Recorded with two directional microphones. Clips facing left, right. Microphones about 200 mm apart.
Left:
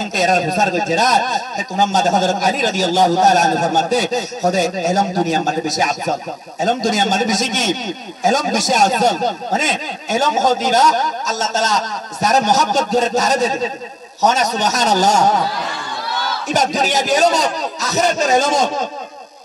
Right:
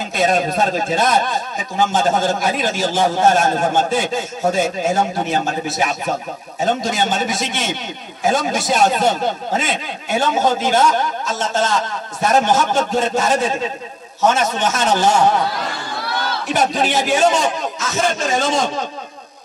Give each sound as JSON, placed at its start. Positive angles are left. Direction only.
{"t": 0.1, "sound": "a man's voice", "side_deg": 40}
{"t": 16.4, "sound": "a man's voice", "side_deg": 45}